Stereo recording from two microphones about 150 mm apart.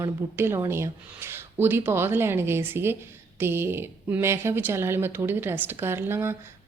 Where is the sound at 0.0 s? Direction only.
15° right (ahead or behind).